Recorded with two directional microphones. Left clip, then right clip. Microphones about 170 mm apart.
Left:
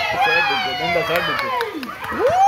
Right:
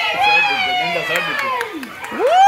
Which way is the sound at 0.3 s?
90° left.